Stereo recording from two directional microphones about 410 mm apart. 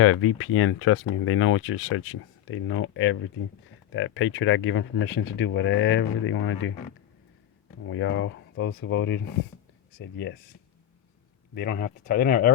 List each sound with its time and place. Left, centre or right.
0.0 s speech: left
7.9 s speech: left
11.5 s speech: left